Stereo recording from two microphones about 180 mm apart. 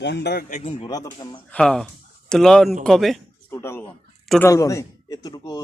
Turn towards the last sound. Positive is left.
turn(degrees=20)  # may be behind; listen again after turning